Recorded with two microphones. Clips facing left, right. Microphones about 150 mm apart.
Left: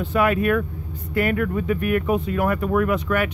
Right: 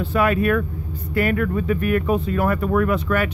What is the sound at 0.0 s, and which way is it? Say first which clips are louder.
Speech: right 1 dB; 20° left (ahead or behind).